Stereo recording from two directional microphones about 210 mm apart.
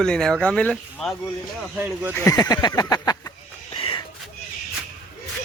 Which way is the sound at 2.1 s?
15° left (ahead or behind).